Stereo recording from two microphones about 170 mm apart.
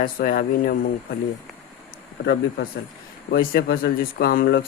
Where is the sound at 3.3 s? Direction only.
65° left (ahead or behind).